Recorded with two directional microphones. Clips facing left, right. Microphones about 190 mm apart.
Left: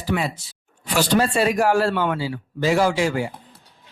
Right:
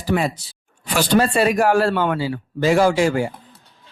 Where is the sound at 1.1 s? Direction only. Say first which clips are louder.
Right 3 dB; 55° right (ahead or behind).